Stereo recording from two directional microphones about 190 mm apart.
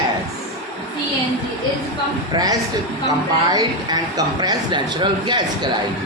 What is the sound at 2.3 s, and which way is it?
A man's voice, 20° right (ahead or behind).